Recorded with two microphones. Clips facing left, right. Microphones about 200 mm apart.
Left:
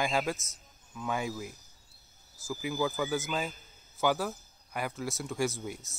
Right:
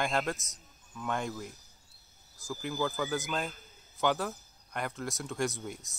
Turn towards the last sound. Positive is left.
turn(degrees=0)  # may be behind; listen again after turning